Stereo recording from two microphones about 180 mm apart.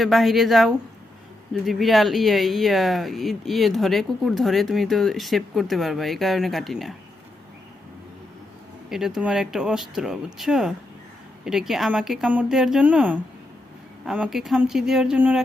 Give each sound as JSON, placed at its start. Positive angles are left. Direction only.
{"t": 0.0, "sound": "speech", "side_deg": 0}
{"t": 8.9, "sound": "speech", "side_deg": -5}